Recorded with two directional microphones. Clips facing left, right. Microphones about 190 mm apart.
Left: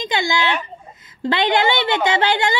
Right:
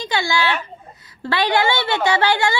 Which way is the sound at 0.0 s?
20° left (ahead or behind).